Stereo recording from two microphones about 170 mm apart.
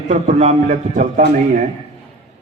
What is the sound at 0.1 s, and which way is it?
A man's voice, 40° right (ahead or behind).